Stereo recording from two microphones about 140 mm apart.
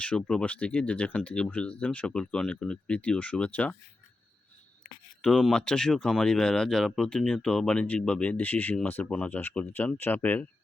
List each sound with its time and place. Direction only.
0.0 s speech: 5° left (ahead or behind)
5.2 s speech: 5° left (ahead or behind)